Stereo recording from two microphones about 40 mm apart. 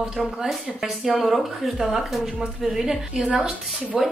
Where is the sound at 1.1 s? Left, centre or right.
Centre.